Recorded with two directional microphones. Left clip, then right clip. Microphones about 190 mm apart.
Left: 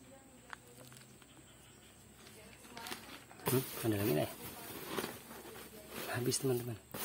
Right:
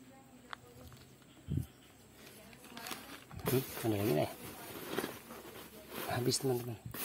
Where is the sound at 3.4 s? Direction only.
Centre (ahead or behind).